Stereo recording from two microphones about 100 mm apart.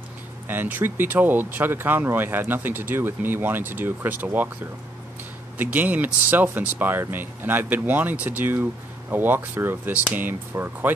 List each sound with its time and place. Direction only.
0.5 s speech: 20° right (ahead or behind)
5.6 s speech: 15° right (ahead or behind)